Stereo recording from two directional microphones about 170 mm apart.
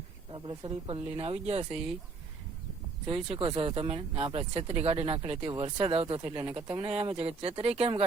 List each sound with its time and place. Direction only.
0.3 s speech: 30° right (ahead or behind)
3.1 s speech: 30° right (ahead or behind)